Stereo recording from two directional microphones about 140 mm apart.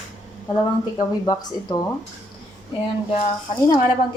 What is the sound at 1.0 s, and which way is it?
Speech, 30° left (ahead or behind).